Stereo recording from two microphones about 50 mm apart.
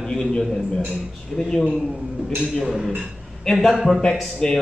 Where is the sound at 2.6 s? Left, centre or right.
Centre.